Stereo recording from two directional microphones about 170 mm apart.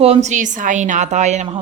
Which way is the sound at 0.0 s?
40° right (ahead or behind).